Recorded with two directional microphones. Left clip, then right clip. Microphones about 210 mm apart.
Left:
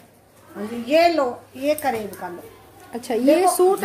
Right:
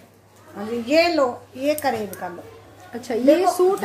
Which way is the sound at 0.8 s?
5° right (ahead or behind).